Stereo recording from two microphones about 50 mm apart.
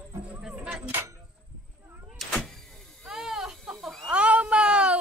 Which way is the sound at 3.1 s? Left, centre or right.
Centre.